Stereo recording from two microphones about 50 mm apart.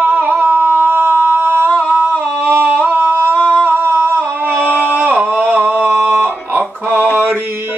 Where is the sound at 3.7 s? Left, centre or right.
Right.